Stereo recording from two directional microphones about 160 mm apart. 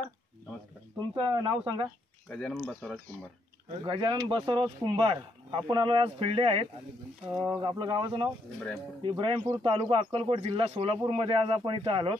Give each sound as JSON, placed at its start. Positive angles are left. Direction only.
{"t": 1.1, "sound": "speech", "side_deg": -30}
{"t": 2.2, "sound": "speech", "side_deg": 5}
{"t": 3.8, "sound": "speech", "side_deg": -30}